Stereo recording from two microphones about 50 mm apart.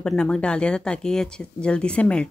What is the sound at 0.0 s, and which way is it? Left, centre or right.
Speech, centre.